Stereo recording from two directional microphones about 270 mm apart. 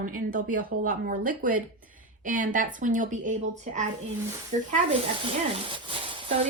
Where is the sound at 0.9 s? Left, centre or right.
Right.